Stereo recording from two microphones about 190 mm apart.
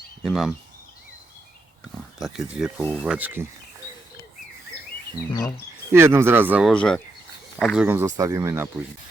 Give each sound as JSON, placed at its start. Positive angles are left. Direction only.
{"t": 0.2, "sound": "speech", "side_deg": 0}
{"t": 2.1, "sound": "speech", "side_deg": 0}
{"t": 5.9, "sound": "speech", "side_deg": -15}
{"t": 7.9, "sound": "speech", "side_deg": -15}